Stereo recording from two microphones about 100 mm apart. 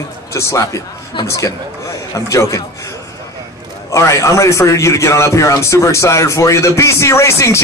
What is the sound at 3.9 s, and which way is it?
A man's voice, 30° left (ahead or behind).